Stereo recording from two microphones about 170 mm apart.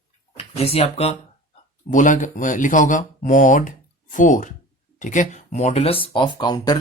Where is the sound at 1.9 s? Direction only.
50° left (ahead or behind).